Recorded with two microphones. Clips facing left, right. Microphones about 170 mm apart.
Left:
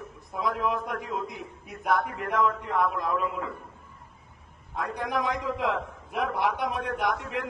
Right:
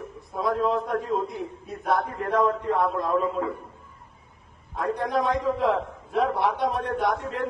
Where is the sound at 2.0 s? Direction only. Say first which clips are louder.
Right 3 dB; 30° right (ahead or behind).